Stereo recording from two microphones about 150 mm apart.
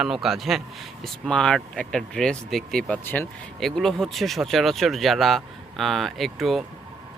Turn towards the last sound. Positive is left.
turn(degrees=0)  # may be behind; listen again after turning